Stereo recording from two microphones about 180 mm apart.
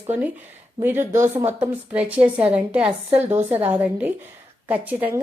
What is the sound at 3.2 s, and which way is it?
Speech, 35° right (ahead or behind).